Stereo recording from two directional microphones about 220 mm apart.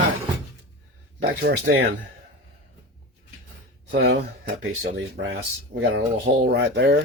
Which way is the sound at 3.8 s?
50° right (ahead or behind).